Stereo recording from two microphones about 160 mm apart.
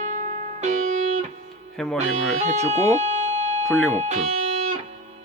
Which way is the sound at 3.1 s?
45° right (ahead or behind).